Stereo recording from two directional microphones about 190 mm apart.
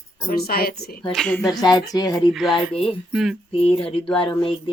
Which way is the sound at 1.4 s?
20° left (ahead or behind).